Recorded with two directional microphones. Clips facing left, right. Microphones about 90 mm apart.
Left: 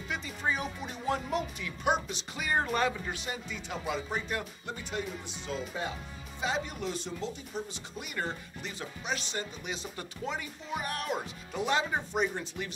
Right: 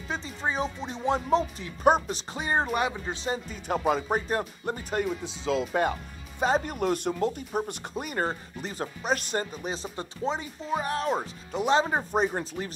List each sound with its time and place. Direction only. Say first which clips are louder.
0.1 s speech: right 3 dB; 30° right (ahead or behind)
2.3 s speech: right 3 dB; 30° right (ahead or behind)
3.4 s speech: right 12 dB; 45° right (ahead or behind)
4.3 s speech: right 7 dB; 40° right (ahead or behind)
5.0 s speech: right 9 dB; 80° right; by 5.9 s 65° right (ahead or behind)
6.4 s speech: right 8 dB; 45° right (ahead or behind)
7.9 s speech: right 6 dB; 45° right (ahead or behind); by 11.8 s 25° right (ahead or behind)
11.8 s speech: right 5 dB; 40° right (ahead or behind)